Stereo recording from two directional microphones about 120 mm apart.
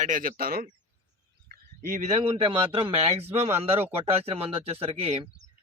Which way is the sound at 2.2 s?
50° right (ahead or behind).